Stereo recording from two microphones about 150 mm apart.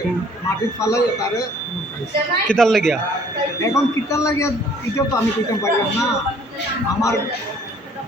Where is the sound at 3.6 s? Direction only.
20° left (ahead or behind).